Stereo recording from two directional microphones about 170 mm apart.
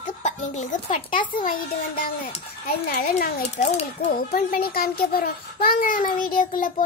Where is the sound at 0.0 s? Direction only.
45° left (ahead or behind); by 3.4 s 65° left (ahead or behind).